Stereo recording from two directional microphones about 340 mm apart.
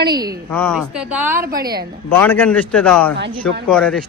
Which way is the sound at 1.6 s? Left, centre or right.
Right.